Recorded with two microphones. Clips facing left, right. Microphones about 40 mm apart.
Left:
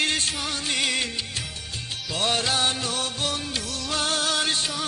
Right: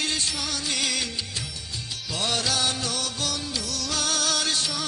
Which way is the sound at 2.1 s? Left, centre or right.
Left.